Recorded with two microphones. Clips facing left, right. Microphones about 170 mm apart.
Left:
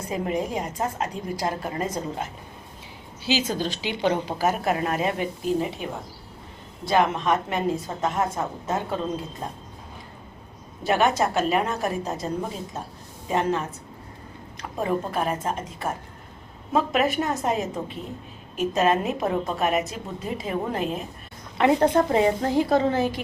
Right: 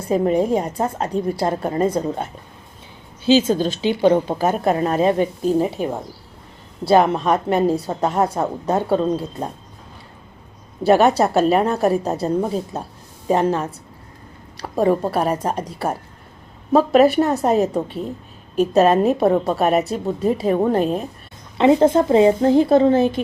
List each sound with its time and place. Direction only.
0.1 s a woman's voice: 30° right (ahead or behind)
3.7 s a woman's voice: 15° left (ahead or behind)
4.4 s a woman's voice: 30° right (ahead or behind)
10.8 s a woman's voice: 35° right (ahead or behind)
13.2 s a woman's voice: 35° right (ahead or behind)
14.8 s a woman's voice: 35° right (ahead or behind)
21.6 s a woman's voice: 20° right (ahead or behind)